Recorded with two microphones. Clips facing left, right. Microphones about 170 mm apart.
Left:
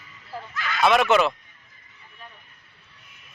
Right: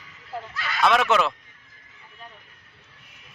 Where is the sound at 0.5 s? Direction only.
35° right (ahead or behind).